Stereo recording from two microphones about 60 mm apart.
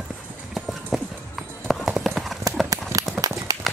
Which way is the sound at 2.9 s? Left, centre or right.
Right.